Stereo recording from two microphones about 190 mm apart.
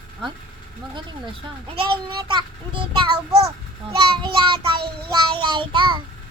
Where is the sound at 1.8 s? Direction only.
25° right (ahead or behind).